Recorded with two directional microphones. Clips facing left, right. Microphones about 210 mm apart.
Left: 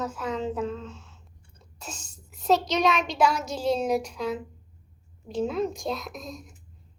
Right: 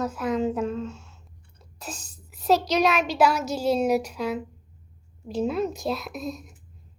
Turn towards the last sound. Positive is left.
turn(degrees=-5)  # may be behind; listen again after turning